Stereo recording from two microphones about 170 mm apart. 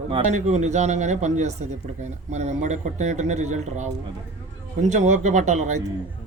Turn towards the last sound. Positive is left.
turn(degrees=-45)  # may be behind; listen again after turning